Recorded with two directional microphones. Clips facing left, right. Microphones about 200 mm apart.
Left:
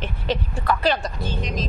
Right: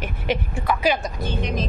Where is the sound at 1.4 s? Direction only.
60° right (ahead or behind).